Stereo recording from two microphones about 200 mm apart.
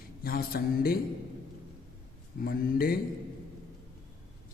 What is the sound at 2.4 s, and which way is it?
Speech, 50° left (ahead or behind).